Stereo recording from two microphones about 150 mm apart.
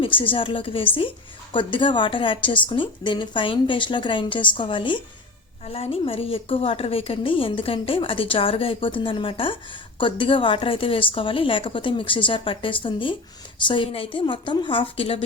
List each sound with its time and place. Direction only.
0.0 s a woman's voice: 35° left (ahead or behind)